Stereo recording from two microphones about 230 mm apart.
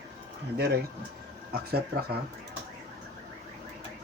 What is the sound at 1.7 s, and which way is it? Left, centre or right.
Speech, right.